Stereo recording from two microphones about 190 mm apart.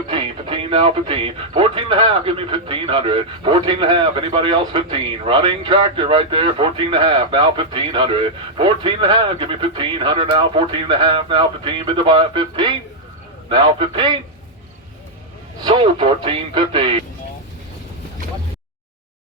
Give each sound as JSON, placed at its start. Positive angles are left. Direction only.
{"t": 0.1, "sound": "speech", "side_deg": -30}
{"t": 15.6, "sound": "speech", "side_deg": -25}